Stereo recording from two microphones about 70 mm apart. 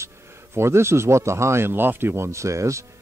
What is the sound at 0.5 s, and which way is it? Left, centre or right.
Speech, right.